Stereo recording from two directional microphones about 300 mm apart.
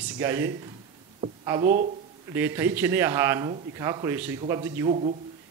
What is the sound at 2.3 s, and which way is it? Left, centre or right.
A man's voice, centre.